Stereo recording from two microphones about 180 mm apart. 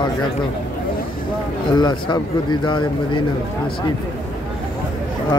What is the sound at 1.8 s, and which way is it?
Speech, 25° left (ahead or behind).